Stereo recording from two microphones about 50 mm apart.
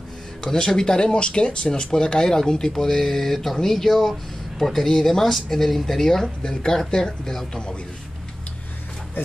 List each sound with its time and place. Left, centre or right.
0.4 s speech: centre